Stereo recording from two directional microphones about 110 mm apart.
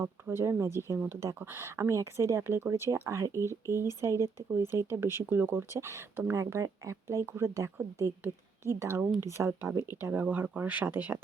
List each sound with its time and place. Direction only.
0.0 s speech: 20° right (ahead or behind)